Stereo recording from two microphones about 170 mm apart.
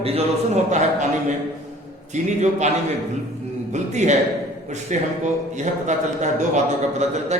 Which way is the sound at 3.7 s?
40° right (ahead or behind).